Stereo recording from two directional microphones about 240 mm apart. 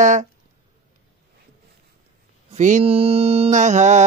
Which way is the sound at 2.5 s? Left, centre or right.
Right.